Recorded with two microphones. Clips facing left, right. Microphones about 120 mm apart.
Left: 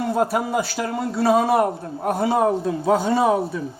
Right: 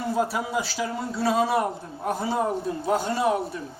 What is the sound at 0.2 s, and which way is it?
A man's voice, 60° left (ahead or behind).